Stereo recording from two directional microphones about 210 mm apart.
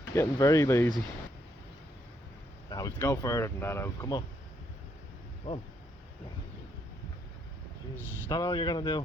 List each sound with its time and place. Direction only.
0.1 s speech: 15° left (ahead or behind)
2.6 s speech: 15° left (ahead or behind)
7.9 s speech: 20° left (ahead or behind)